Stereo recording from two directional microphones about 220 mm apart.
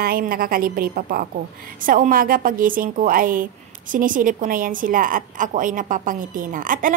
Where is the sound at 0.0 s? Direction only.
40° right (ahead or behind).